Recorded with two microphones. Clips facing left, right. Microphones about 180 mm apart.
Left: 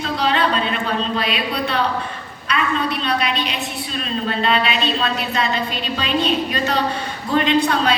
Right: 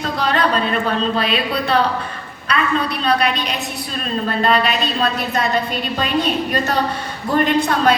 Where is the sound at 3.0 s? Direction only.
40° right (ahead or behind).